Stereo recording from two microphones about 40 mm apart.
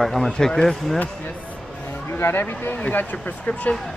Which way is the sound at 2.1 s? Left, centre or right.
Left.